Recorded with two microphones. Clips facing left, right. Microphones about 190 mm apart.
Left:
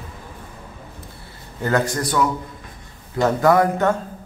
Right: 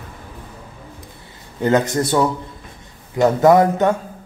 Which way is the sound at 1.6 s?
20° right (ahead or behind).